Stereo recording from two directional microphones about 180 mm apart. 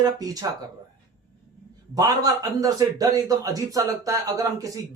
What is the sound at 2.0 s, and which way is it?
A man's voice, 20° right (ahead or behind).